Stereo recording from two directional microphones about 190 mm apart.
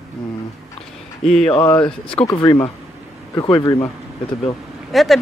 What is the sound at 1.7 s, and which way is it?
Speech, 25° left (ahead or behind).